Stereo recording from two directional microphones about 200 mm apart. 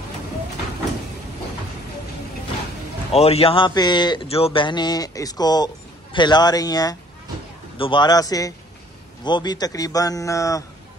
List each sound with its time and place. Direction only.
3.1 s a man's voice: 30° left (ahead or behind)